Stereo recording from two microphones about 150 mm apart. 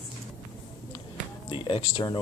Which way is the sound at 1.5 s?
30° left (ahead or behind).